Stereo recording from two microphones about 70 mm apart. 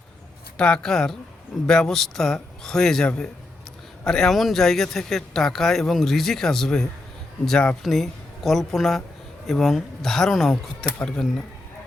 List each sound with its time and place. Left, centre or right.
0.5 s a man's voice: centre